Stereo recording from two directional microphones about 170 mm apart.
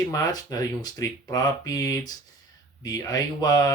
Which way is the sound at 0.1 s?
20° left (ahead or behind).